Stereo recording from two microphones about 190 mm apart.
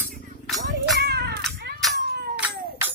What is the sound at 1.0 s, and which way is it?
Children playing, 60° right (ahead or behind).